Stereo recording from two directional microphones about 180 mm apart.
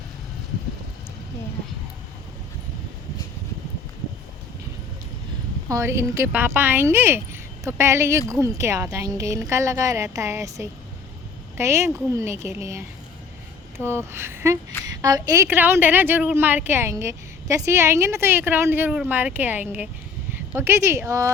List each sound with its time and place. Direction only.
5.6 s a woman's voice: 15° right (ahead or behind)